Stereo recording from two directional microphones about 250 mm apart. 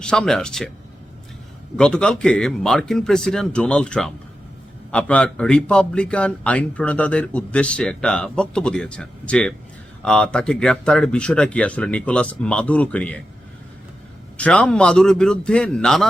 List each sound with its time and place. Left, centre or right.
0.0 s a man's voice: centre
1.7 s a man's voice: centre
14.3 s a man's voice: centre